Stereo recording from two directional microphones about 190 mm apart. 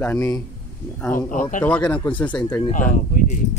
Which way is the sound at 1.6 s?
5° left (ahead or behind).